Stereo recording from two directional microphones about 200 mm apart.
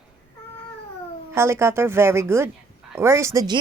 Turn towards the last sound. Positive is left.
turn(degrees=-20)  # may be behind; listen again after turning